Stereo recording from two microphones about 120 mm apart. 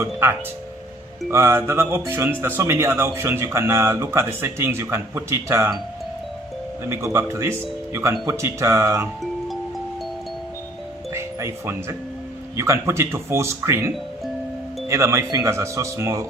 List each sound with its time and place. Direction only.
0.0 s speech: 20° right (ahead or behind)
6.8 s speech: 25° right (ahead or behind)
11.1 s speech: 20° right (ahead or behind)